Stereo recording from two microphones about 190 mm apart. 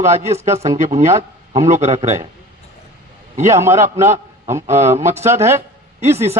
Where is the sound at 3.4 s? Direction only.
15° right (ahead or behind).